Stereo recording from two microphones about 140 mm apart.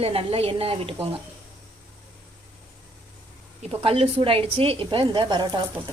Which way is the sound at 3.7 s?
45° right (ahead or behind).